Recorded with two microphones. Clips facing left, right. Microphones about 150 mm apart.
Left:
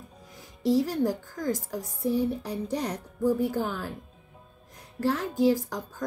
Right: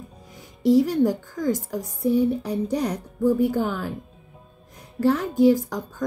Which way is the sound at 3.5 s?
75° right (ahead or behind).